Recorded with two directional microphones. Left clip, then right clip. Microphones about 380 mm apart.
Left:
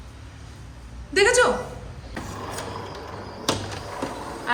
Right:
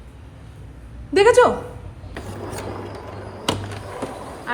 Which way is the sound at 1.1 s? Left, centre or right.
Centre.